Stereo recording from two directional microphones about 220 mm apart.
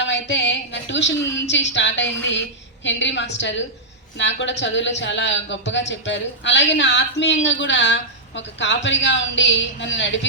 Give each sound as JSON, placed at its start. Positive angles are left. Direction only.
{"t": 0.0, "sound": "a woman's voice", "side_deg": 55}